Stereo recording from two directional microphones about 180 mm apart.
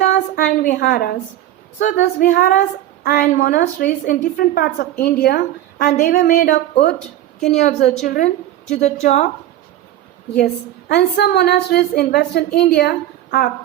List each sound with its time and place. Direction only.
0.0 s a woman's voice: 45° left (ahead or behind)
1.8 s a woman's voice: 45° left (ahead or behind)
7.4 s a woman's voice: 40° left (ahead or behind)
10.3 s a woman's voice: 65° left (ahead or behind)